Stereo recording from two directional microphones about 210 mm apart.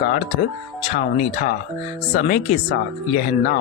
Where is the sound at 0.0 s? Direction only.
35° left (ahead or behind).